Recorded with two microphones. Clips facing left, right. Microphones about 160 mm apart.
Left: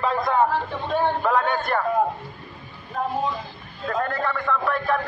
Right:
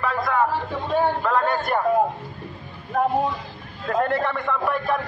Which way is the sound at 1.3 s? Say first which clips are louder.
Right 1 dB; 5° right (ahead or behind).